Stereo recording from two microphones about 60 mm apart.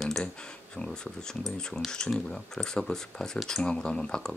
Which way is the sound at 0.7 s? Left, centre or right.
Centre.